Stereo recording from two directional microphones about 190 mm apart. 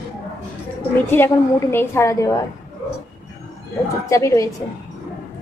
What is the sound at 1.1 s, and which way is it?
A woman's voice, 10° left (ahead or behind).